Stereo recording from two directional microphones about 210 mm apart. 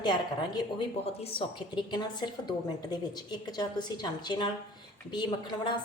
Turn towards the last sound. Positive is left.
turn(degrees=20)  # may be behind; listen again after turning